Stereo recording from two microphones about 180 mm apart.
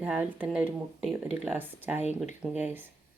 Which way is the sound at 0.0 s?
10° right (ahead or behind).